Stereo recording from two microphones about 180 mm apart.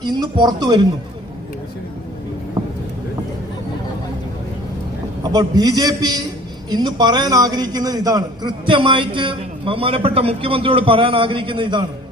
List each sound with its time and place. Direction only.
0.0 s a man's voice: 20° right (ahead or behind)
5.2 s a man's voice: 20° right (ahead or behind)